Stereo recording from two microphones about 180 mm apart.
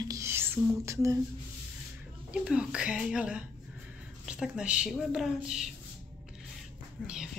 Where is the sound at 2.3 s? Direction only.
5° right (ahead or behind).